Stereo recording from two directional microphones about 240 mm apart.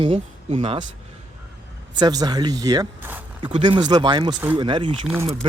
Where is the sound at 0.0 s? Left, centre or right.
Right.